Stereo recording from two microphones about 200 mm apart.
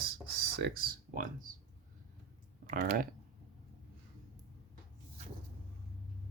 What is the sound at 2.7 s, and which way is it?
Speech, 45° right (ahead or behind).